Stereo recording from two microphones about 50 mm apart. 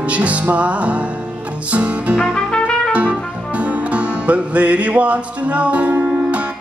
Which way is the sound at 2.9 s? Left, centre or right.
Right.